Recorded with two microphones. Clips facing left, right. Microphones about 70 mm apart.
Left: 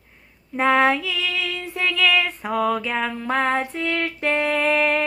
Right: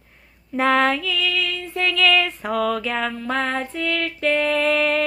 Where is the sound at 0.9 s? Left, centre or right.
Left.